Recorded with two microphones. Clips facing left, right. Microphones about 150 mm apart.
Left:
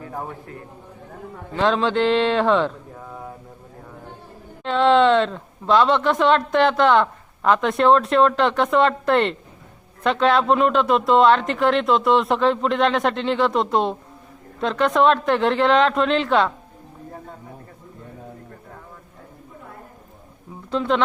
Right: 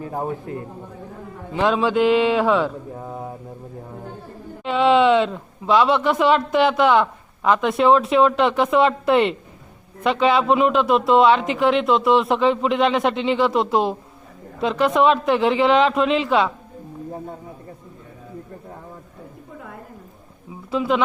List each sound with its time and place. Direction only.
1.5 s a man's voice: 10° right (ahead or behind)
3.0 s a sound: 25° right (ahead or behind)
4.6 s speech: 5° right (ahead or behind)
20.7 s a man's voice: 5° right (ahead or behind)